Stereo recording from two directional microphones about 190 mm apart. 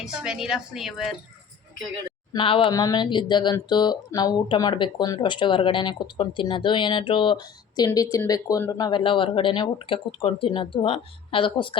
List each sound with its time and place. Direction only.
0.0 s a woman's voice: 5° right (ahead or behind)
2.3 s speech: 25° left (ahead or behind)